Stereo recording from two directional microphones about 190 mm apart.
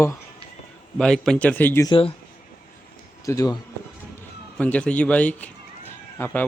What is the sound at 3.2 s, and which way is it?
Speech, 15° left (ahead or behind).